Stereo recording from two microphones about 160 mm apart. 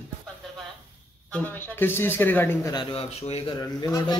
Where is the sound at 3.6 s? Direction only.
25° left (ahead or behind).